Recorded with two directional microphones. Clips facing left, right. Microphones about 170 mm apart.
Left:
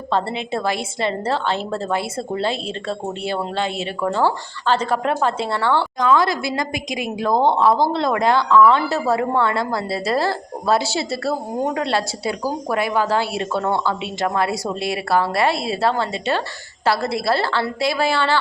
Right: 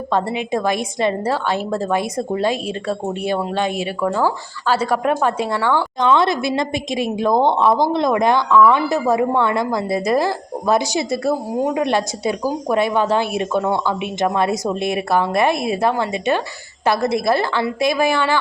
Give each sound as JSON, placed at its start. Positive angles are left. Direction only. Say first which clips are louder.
{"t": 0.1, "sound": "a woman's voice", "louder": "right 2 dB", "side_deg": -15}
{"t": 6.0, "sound": "a woman's voice", "louder": "right 3 dB", "side_deg": -25}